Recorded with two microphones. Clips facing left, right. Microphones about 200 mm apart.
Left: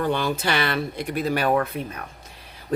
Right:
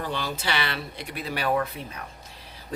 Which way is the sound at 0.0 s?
55° left (ahead or behind).